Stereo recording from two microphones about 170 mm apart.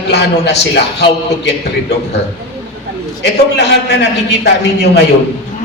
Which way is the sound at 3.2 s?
85° left.